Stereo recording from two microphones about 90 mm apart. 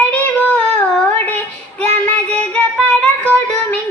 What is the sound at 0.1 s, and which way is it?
Child singing, 15° left (ahead or behind).